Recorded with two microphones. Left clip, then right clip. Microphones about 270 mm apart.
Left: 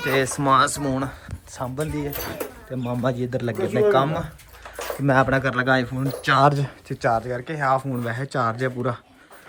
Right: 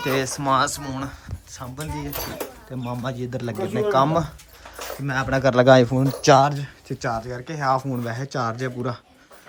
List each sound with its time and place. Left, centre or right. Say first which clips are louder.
0.0 s speech: left 2 dB; centre
5.0 s speech: left 5 dB; centre
5.4 s speech: right 6 dB; centre
6.0 s speech: right 2 dB; centre